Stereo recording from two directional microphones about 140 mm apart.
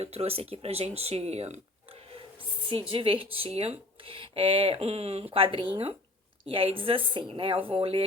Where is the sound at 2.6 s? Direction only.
40° right (ahead or behind).